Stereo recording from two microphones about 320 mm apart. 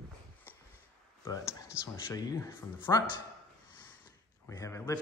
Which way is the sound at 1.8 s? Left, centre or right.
Centre.